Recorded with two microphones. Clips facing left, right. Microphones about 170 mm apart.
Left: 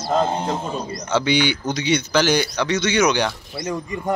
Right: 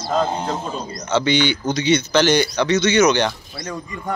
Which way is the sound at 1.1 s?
10° left (ahead or behind).